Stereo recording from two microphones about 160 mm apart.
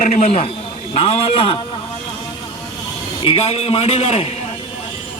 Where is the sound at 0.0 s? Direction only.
45° left (ahead or behind).